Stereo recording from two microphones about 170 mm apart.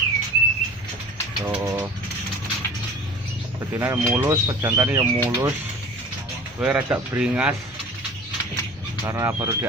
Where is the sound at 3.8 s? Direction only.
15° right (ahead or behind).